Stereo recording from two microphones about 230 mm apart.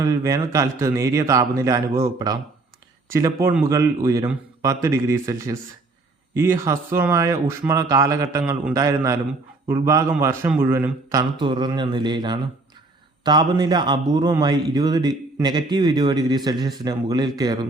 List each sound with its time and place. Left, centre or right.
0.0 s a man's voice: centre